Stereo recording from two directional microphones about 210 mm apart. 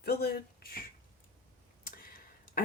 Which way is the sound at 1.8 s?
40° left (ahead or behind).